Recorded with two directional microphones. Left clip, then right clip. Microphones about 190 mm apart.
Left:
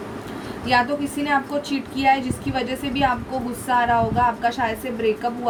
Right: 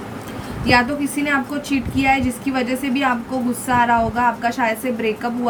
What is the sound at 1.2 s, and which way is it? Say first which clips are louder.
A woman's voice: even; 20° right (ahead or behind).